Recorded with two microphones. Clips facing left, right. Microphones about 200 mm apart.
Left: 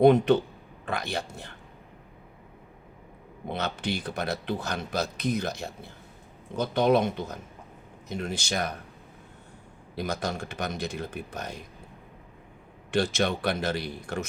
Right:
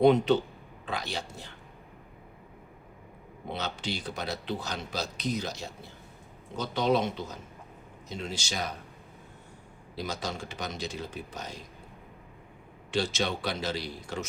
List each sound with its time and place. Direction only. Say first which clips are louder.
0.0 s speech: left 3 dB; 55° left (ahead or behind)
3.5 s speech: left 4 dB; 55° left (ahead or behind)
9.9 s speech: left 4 dB; 55° left (ahead or behind)
12.9 s speech: left 4 dB; 55° left (ahead or behind)